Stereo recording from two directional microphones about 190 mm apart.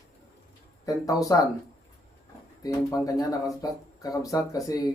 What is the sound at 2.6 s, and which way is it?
Speech, 15° left (ahead or behind).